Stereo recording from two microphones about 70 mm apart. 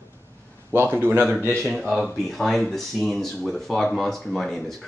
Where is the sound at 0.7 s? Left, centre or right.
Right.